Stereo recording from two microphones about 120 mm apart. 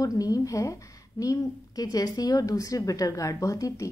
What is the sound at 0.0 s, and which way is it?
A woman's voice, 30° left (ahead or behind).